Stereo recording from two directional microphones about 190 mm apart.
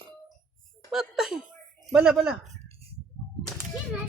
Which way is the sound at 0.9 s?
Centre (ahead or behind).